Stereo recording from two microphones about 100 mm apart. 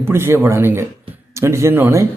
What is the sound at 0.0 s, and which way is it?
Speech, 25° right (ahead or behind).